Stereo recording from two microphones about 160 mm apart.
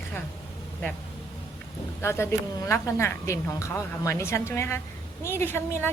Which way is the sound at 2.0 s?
15° left (ahead or behind).